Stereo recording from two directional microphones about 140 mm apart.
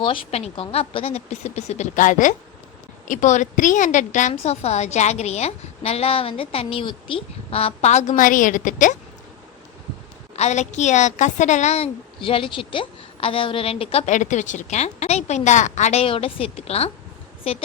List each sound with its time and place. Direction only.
0.0 s a woman's voice: 40° left (ahead or behind); by 9.0 s 65° left (ahead or behind)
10.3 s a woman's voice: 55° left (ahead or behind)